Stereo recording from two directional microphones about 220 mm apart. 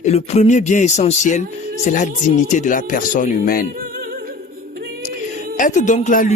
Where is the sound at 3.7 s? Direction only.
40° right (ahead or behind).